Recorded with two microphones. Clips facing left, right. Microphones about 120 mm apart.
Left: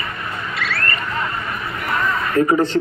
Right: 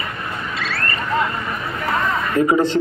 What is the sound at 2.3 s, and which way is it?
Speech, 15° right (ahead or behind).